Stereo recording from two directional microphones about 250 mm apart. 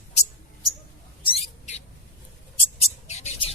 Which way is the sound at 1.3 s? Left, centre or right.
Left.